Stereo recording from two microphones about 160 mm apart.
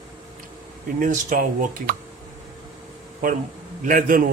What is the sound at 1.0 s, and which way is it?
Speech, 55° right (ahead or behind).